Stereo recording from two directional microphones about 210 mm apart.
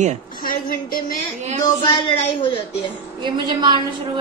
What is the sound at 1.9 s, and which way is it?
Speech, 25° left (ahead or behind).